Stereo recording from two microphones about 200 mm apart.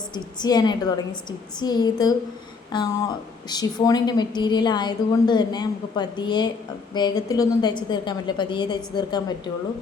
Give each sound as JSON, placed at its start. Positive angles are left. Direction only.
{"t": 0.1, "sound": "a woman's voice", "side_deg": 20}